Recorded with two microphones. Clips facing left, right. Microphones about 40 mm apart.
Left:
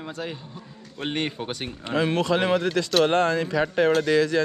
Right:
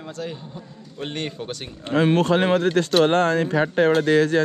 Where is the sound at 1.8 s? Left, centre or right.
Right.